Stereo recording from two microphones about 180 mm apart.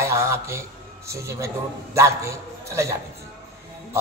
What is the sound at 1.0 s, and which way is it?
A man's voice, 15° right (ahead or behind).